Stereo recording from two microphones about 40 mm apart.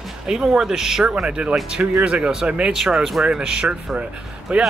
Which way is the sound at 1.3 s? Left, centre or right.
Right.